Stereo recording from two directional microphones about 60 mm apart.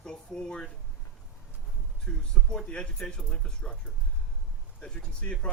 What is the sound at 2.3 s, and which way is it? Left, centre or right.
Speech, centre.